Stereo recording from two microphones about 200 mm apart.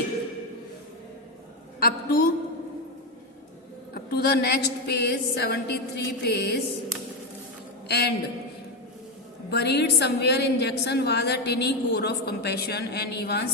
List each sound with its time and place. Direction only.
1.8 s a man's voice: 50° left (ahead or behind)
3.9 s a woman's voice: 50° left (ahead or behind)
9.5 s a woman's voice: 55° left (ahead or behind)